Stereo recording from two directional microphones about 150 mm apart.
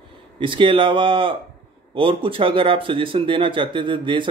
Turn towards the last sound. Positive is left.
turn(degrees=-35)  # may be behind; listen again after turning